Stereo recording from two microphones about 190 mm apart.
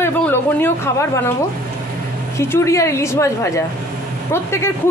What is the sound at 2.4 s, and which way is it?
Speech, 15° left (ahead or behind).